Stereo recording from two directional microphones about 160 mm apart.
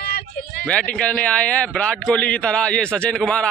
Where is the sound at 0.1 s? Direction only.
80° left.